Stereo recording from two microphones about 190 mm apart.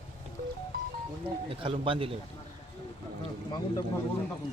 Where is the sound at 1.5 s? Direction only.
30° right (ahead or behind).